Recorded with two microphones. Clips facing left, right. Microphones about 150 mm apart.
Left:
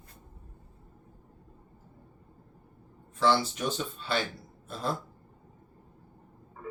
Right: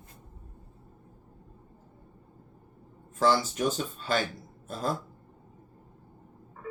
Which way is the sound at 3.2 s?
40° right (ahead or behind).